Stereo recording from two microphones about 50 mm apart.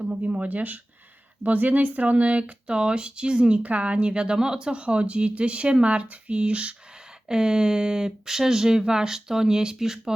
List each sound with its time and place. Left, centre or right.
0.0 s speech: right
3.6 s speech: right; by 10.2 s centre